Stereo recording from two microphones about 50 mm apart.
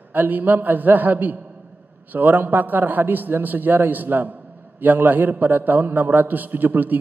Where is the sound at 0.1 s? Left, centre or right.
Right.